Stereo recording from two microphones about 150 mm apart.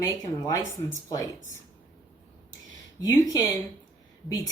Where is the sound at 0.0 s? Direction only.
25° left (ahead or behind).